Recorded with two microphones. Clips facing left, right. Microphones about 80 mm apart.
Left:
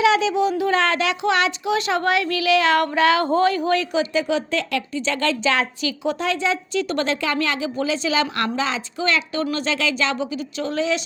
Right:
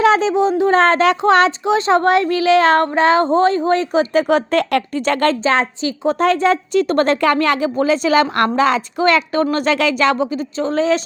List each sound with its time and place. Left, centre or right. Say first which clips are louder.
0.0 s speech: right 4 dB; right
4.1 s a woman's voice: right 7 dB; right
10.6 s speech: right 6 dB; right